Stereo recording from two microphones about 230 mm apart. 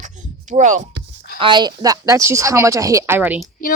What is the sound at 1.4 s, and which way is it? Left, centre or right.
Speech, centre.